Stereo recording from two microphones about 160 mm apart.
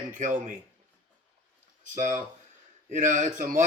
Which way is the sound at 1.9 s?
50° right (ahead or behind).